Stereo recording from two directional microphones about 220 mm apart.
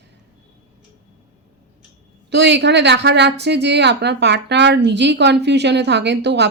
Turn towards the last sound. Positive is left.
turn(degrees=-50)  # may be behind; listen again after turning